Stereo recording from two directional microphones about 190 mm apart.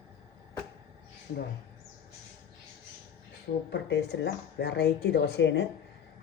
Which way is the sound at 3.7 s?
65° left (ahead or behind).